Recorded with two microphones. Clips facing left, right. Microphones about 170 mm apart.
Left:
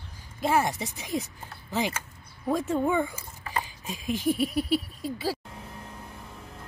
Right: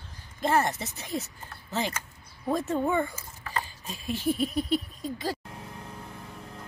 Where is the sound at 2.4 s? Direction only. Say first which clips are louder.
Left 1 dB; 10° left (ahead or behind).